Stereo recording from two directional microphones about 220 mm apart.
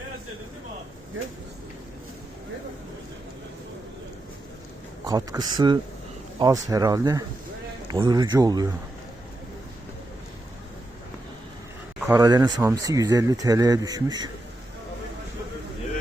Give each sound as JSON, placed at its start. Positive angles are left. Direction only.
{"t": 1.2, "sound": "speech", "side_deg": -60}
{"t": 5.0, "sound": "speech", "side_deg": -15}
{"t": 12.0, "sound": "speech", "side_deg": -15}